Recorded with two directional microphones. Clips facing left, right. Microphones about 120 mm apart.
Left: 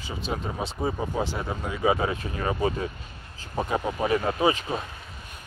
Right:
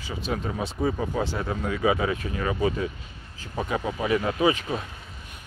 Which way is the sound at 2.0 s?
30° left (ahead or behind).